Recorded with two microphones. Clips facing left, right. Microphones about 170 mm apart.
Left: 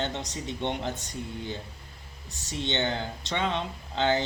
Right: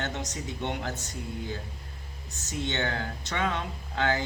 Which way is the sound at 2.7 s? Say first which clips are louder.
Left 3 dB; 25° left (ahead or behind).